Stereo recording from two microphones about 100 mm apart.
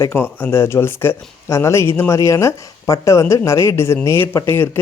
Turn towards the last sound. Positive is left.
turn(degrees=25)  # may be behind; listen again after turning